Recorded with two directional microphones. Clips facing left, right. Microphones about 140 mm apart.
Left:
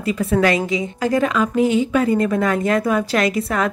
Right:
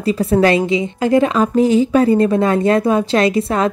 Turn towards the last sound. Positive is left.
turn(degrees=-25)  # may be behind; listen again after turning